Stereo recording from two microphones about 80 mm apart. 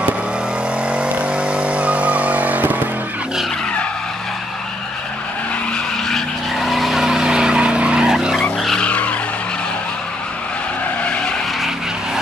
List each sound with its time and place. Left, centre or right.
0.9 s vehicle: centre
6.0 s vehicle: centre
8.8 s skidding: centre